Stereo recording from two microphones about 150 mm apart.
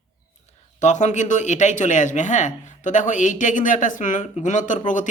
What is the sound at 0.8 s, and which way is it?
Speech, 50° left (ahead or behind).